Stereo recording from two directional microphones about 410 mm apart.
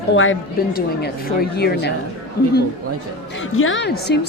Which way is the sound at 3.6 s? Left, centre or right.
Left.